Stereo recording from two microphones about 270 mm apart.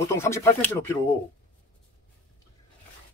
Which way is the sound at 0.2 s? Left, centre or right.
Centre.